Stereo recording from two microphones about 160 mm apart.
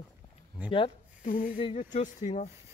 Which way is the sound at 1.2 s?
55° left (ahead or behind).